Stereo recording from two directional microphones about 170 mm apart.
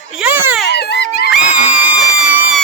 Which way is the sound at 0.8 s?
75° left (ahead or behind).